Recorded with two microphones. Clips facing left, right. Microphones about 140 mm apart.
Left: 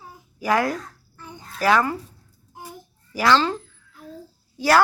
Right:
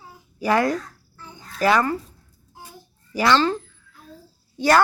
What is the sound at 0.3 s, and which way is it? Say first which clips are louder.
Speech: right 2 dB; 5° left (ahead or behind).